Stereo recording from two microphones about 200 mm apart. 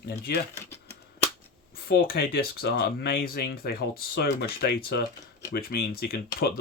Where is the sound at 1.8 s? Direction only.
50° left (ahead or behind).